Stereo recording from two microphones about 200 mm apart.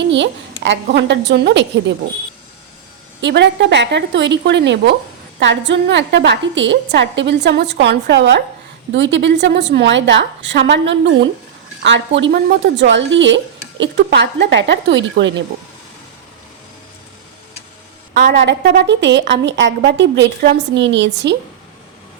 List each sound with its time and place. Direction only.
0.6 s speech: 60° right (ahead or behind)
3.2 s speech: 60° right (ahead or behind)
18.1 s a woman's voice: 55° right (ahead or behind)